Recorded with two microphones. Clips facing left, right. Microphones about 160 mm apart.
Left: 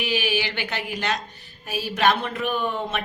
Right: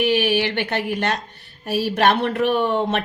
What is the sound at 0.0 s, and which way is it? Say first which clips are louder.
A woman's voice: right 7 dB; 60° right (ahead or behind).